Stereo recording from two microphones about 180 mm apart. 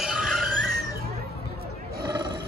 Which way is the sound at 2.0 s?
25° right (ahead or behind).